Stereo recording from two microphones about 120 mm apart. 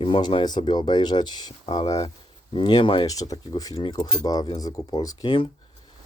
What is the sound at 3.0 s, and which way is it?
Speech, 30° left (ahead or behind).